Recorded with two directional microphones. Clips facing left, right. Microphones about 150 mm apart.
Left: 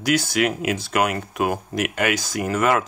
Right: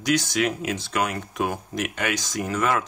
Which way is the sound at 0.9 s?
60° left (ahead or behind).